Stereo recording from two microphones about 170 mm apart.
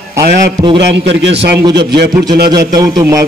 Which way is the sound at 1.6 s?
25° right (ahead or behind).